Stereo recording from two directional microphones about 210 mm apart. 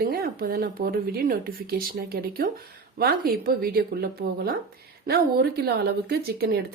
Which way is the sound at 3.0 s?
45° right (ahead or behind).